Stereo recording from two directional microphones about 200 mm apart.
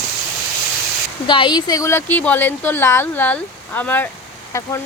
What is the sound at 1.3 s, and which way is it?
Speech, 25° left (ahead or behind).